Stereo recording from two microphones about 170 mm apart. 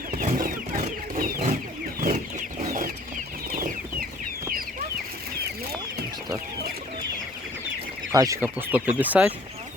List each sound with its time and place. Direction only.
0.2 s chicken: 55° right (ahead or behind)
8.1 s speech: 20° right (ahead or behind)